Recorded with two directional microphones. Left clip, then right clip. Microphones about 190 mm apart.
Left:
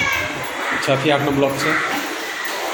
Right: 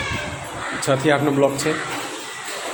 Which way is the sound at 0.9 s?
35° right (ahead or behind).